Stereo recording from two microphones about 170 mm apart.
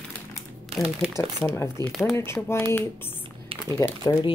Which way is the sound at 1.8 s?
Centre (ahead or behind).